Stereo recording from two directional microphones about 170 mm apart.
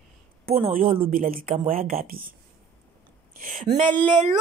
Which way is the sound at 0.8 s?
35° right (ahead or behind).